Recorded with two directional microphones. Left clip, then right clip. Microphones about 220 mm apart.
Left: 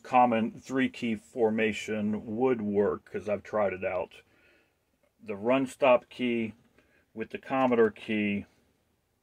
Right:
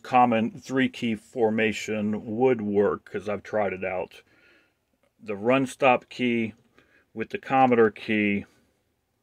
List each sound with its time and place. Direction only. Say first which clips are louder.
0.0 s speech: right 3 dB; 35° right (ahead or behind)